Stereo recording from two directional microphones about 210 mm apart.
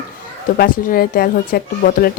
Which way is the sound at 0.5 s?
45° left (ahead or behind).